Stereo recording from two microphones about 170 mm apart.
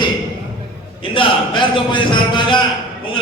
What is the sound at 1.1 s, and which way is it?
A man's voice, 30° left (ahead or behind).